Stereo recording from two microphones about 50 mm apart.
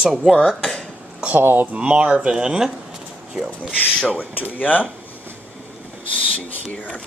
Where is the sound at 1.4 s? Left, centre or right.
Right.